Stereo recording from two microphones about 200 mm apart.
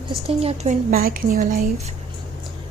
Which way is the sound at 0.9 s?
45° right (ahead or behind).